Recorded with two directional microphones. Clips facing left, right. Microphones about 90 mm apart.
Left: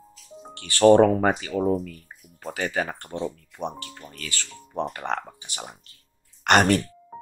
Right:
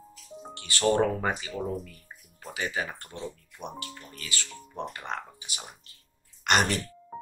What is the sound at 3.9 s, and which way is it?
Speech, 45° left (ahead or behind).